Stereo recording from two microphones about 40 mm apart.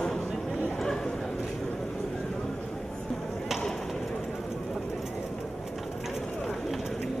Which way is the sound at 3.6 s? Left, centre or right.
Centre.